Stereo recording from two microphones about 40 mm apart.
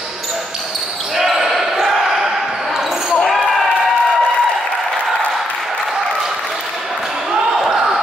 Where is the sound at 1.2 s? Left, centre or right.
Centre.